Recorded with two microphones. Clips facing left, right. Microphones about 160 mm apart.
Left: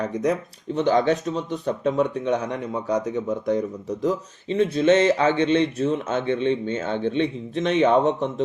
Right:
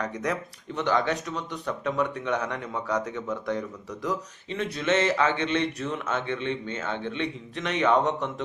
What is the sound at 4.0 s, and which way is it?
A man's voice, 25° left (ahead or behind).